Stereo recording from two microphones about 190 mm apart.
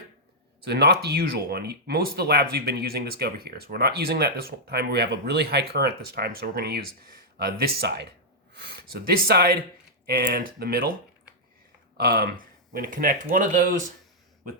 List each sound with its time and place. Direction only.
0.6 s speech: 60° right (ahead or behind)
11.9 s speech: 55° right (ahead or behind)